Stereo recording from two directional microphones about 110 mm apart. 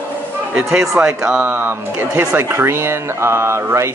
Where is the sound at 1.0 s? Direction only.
15° right (ahead or behind).